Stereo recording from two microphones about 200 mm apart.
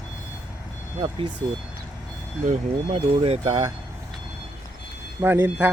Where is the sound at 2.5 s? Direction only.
30° right (ahead or behind).